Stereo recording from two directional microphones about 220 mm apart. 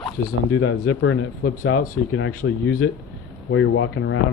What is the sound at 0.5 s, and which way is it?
Speech, 70° left (ahead or behind).